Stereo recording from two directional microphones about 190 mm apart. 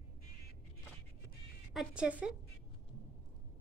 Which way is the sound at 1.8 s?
5° right (ahead or behind).